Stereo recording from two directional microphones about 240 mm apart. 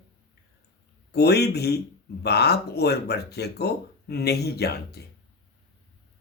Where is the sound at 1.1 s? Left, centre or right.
Left.